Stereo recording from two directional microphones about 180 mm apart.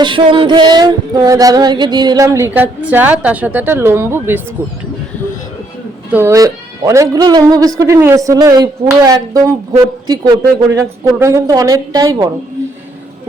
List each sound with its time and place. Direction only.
0.0 s music: 30° right (ahead or behind); by 4.4 s 15° right (ahead or behind)
6.1 s music: 10° right (ahead or behind)